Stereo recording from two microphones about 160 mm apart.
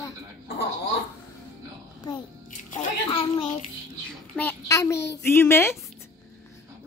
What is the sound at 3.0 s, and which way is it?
Speech, 30° left (ahead or behind).